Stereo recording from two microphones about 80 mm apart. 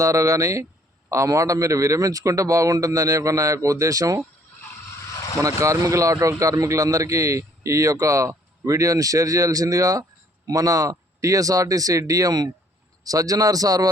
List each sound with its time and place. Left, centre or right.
0.0 s a man's voice: right
5.4 s a man's voice: right